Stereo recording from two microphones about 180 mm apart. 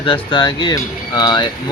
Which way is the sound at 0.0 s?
30° left (ahead or behind).